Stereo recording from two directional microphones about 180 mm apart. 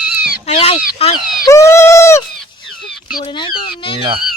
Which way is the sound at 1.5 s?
15° left (ahead or behind).